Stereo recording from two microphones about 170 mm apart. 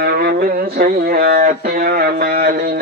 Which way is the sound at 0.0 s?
65° right (ahead or behind).